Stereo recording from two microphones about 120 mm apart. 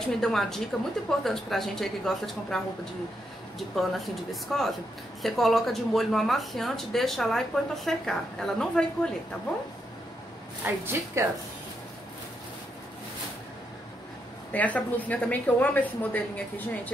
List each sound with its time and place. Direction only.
0.0 s speech: 5° left (ahead or behind)
10.6 s speech: 20° right (ahead or behind)
14.5 s a woman's voice: 15° left (ahead or behind)